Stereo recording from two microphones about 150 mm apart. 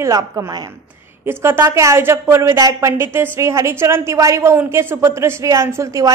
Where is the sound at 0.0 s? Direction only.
20° right (ahead or behind).